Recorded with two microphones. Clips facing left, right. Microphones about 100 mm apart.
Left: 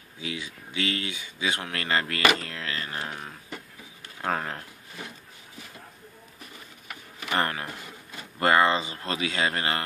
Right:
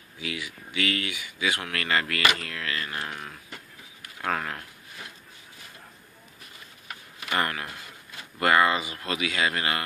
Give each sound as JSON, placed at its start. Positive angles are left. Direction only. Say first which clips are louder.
{"t": 0.2, "sound": "speech", "louder": "even", "side_deg": 30}
{"t": 4.0, "sound": "a sound", "louder": "even", "side_deg": 25}
{"t": 7.2, "sound": "speech", "louder": "left 1 dB", "side_deg": 30}